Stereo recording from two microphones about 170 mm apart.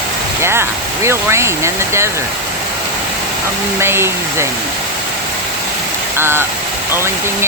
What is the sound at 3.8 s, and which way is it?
Speech, 15° right (ahead or behind).